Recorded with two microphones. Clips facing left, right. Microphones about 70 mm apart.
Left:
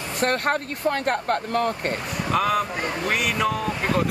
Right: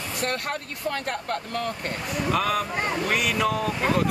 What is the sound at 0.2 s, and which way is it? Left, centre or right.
Speech, left.